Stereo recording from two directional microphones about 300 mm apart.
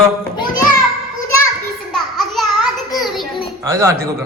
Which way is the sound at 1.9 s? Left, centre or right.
Centre.